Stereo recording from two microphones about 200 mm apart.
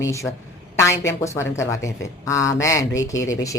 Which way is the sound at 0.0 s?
15° left (ahead or behind).